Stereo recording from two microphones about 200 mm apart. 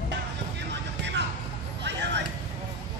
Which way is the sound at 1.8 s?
60° right (ahead or behind).